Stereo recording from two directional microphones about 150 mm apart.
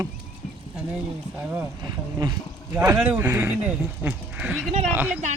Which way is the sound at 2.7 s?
10° right (ahead or behind).